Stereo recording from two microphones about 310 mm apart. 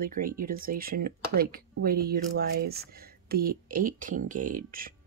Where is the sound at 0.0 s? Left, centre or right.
Right.